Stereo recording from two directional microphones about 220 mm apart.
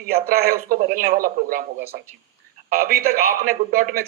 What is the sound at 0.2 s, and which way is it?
A man's voice, 40° right (ahead or behind).